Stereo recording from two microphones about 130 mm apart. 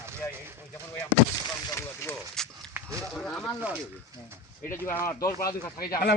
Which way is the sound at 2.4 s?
5° left (ahead or behind).